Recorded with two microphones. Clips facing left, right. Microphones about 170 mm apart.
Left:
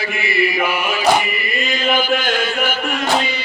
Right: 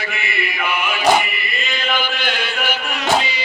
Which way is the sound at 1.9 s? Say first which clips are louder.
Left 6 dB; 45° left (ahead or behind).